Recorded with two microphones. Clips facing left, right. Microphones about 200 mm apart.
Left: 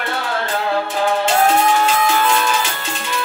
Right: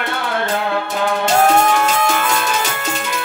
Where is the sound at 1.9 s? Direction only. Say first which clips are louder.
Left 1 dB; 45° right (ahead or behind).